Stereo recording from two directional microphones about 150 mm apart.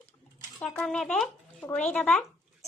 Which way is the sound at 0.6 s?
10° left (ahead or behind).